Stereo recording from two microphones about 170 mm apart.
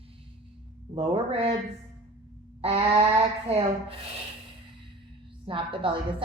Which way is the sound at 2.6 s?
35° right (ahead or behind).